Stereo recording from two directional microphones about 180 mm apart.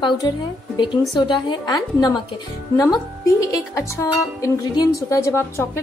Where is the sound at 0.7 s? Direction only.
25° left (ahead or behind).